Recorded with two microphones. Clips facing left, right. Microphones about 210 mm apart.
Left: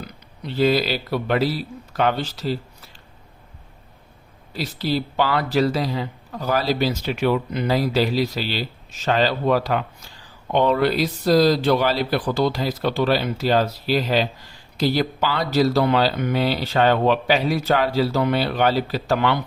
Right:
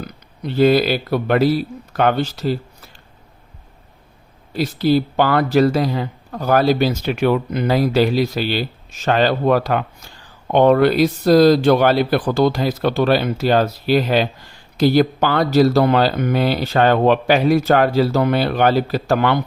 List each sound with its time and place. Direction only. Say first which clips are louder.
0.0 s speech: right 6 dB; 50° right (ahead or behind)
4.5 s speech: right 8 dB; 50° right (ahead or behind)